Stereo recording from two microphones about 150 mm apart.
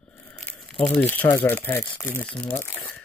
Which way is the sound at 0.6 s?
5° left (ahead or behind).